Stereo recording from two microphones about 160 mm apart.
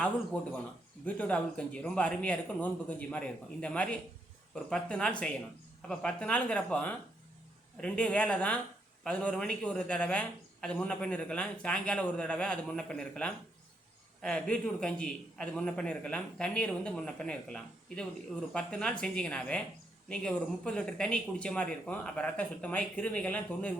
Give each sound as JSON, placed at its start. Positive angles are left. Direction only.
{"t": 0.3, "sound": "a man's voice", "side_deg": 5}